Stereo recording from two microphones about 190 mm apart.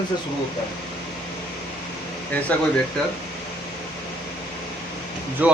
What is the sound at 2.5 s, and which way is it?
Speech, 5° left (ahead or behind).